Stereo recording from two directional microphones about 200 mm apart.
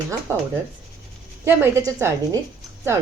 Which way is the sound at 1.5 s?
10° right (ahead or behind).